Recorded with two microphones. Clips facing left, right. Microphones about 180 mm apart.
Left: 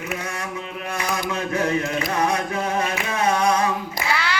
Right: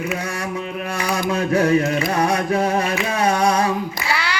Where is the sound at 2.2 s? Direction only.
35° right (ahead or behind).